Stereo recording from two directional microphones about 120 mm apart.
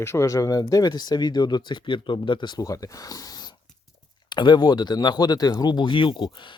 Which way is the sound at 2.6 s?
30° left (ahead or behind).